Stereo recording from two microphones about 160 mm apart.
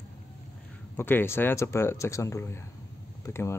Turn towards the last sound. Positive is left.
turn(degrees=15)  # may be behind; listen again after turning